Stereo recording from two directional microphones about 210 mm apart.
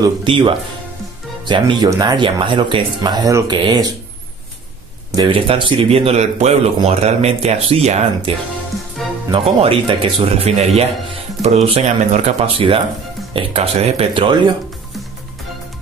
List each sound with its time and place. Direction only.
0.0 s speech: 20° right (ahead or behind)
5.1 s speech: 25° right (ahead or behind)